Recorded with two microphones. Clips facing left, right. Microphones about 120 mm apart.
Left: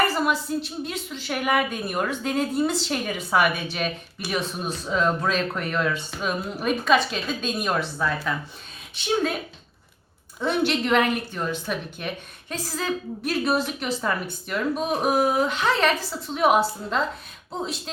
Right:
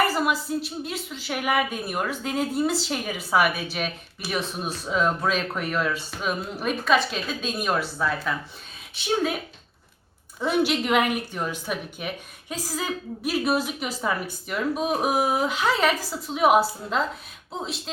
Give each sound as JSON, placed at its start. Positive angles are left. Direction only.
{"t": 0.0, "sound": "speech", "side_deg": -5}
{"t": 10.4, "sound": "a woman's voice", "side_deg": -5}